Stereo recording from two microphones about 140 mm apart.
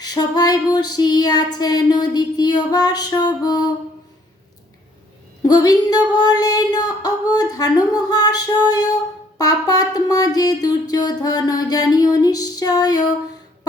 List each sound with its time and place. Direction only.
0.0 s female singing: 30° left (ahead or behind)
5.4 s female singing: 30° left (ahead or behind)